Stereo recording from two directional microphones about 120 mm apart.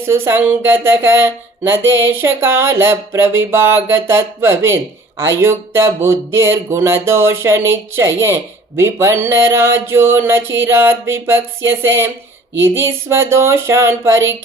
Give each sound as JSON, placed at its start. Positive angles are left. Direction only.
{"t": 0.1, "sound": "speech", "side_deg": -20}